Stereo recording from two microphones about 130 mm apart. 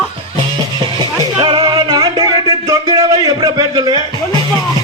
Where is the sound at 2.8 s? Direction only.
30° right (ahead or behind).